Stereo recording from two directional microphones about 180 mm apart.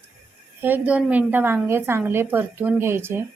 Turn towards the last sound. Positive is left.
turn(degrees=-15)  # may be behind; listen again after turning